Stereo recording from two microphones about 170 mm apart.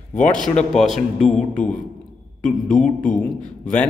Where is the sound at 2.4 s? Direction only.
50° left (ahead or behind).